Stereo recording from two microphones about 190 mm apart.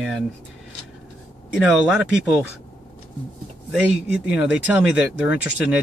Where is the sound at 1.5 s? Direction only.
5° right (ahead or behind).